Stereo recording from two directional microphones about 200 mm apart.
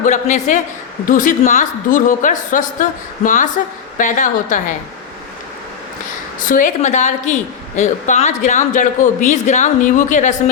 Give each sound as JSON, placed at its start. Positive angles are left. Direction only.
{"t": 0.0, "sound": "a woman's voice", "side_deg": 35}
{"t": 6.4, "sound": "a woman's voice", "side_deg": 40}